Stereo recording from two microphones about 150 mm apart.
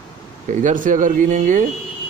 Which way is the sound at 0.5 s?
60° right (ahead or behind).